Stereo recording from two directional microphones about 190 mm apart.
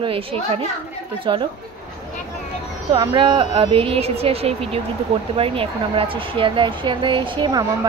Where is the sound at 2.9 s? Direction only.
25° right (ahead or behind).